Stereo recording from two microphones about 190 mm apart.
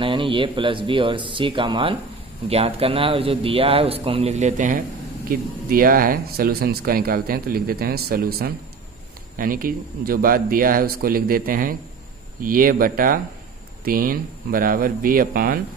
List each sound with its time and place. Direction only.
0.0 s speech: 25° right (ahead or behind); by 15.6 s 50° right (ahead or behind)